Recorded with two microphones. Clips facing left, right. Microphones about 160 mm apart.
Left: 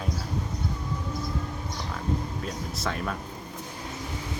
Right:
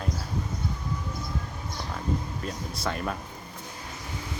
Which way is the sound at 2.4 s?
Centre (ahead or behind).